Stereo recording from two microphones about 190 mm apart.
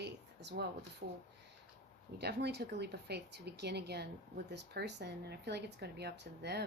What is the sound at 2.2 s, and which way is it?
Speech, 60° right (ahead or behind).